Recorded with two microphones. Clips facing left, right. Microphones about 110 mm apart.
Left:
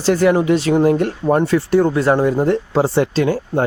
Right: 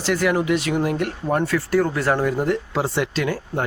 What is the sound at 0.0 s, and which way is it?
Speech, 30° left (ahead or behind).